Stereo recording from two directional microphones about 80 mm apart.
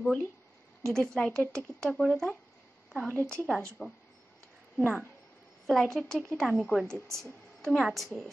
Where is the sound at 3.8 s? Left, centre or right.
Centre.